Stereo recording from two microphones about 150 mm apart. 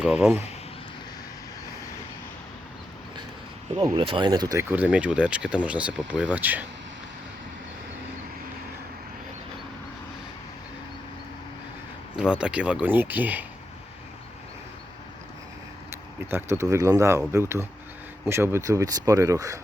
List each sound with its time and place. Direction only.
0.0 s speech: 10° right (ahead or behind)
3.9 s speech: 35° right (ahead or behind)
4.7 s speech: 10° right (ahead or behind)
12.1 s speech: 5° right (ahead or behind)
15.9 s speech: 15° right (ahead or behind)